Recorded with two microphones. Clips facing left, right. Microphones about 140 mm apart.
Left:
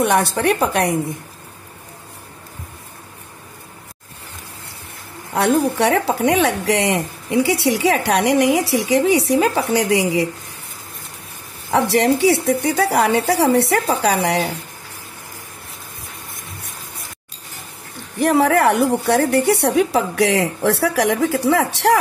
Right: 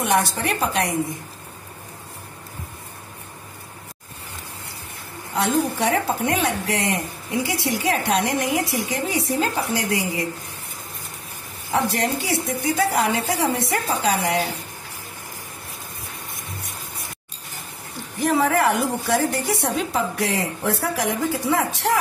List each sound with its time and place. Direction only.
0.0 s speech: 60° left (ahead or behind)
5.3 s speech: 60° left (ahead or behind); by 10.2 s 80° left
11.7 s speech: 70° left (ahead or behind)
18.1 s speech: 65° left (ahead or behind)